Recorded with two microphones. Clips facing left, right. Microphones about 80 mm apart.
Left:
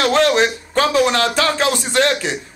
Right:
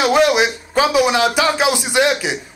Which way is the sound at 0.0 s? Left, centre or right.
Centre.